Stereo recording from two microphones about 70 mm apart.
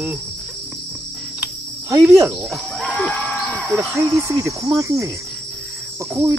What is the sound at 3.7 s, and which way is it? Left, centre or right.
Speech, right.